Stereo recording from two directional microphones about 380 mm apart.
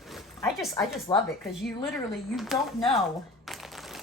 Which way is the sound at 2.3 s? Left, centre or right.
Centre.